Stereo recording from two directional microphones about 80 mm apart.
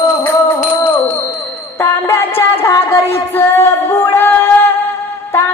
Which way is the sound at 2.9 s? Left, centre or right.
Left.